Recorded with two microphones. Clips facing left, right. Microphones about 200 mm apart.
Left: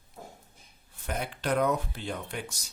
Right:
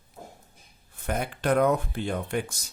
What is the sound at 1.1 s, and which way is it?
Speech, 50° right (ahead or behind).